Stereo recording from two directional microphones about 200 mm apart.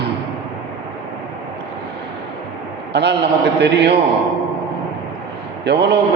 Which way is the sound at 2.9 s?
60° right (ahead or behind).